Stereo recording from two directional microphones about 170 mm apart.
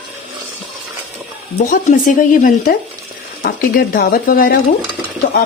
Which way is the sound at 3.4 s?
65° left (ahead or behind).